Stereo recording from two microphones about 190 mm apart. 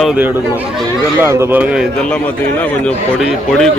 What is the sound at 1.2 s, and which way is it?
Speech, 15° right (ahead or behind).